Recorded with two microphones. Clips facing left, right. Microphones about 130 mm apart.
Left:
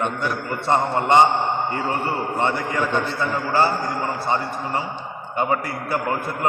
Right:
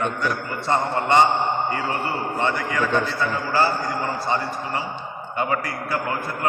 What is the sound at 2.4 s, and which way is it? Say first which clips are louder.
Speech: even; 20° left (ahead or behind).